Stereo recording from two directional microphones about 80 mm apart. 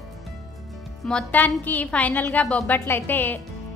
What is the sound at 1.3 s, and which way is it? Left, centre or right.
A woman's voice, left.